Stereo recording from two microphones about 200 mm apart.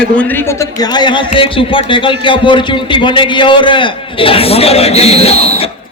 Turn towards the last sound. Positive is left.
turn(degrees=30)  # may be behind; listen again after turning